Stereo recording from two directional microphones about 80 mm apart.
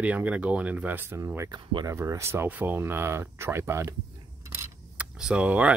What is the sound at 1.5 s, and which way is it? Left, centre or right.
Speech, right.